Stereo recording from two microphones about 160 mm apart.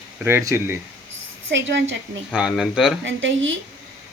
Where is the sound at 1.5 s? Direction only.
90° right.